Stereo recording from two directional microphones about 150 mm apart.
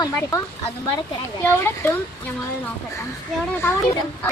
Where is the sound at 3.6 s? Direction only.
15° left (ahead or behind).